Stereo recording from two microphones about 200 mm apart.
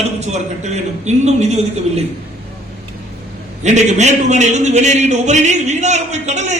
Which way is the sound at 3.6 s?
35° right (ahead or behind).